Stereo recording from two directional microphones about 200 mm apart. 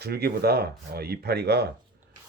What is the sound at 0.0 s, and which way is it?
Speech, 50° right (ahead or behind).